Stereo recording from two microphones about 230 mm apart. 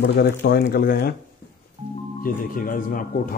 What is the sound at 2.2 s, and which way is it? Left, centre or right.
Speech, left.